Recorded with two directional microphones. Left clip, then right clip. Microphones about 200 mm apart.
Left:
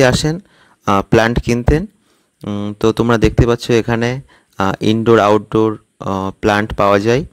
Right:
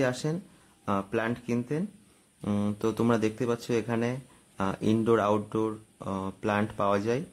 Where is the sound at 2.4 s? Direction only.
30° left (ahead or behind).